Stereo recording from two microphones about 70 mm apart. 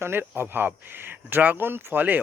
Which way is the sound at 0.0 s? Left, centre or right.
Right.